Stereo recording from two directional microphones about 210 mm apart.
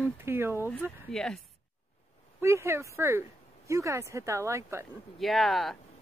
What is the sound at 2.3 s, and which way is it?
Speech, 15° right (ahead or behind).